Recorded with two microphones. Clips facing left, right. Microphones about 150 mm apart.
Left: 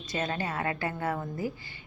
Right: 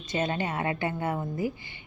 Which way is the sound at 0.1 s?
25° right (ahead or behind).